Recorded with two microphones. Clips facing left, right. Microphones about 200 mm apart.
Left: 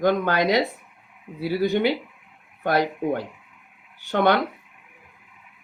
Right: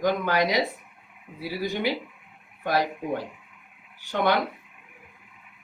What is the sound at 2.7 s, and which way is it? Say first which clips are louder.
Speech: left 4 dB; 60° left (ahead or behind).